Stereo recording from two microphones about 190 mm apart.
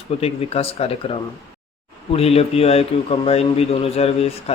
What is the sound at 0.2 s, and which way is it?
A man's voice, 30° left (ahead or behind).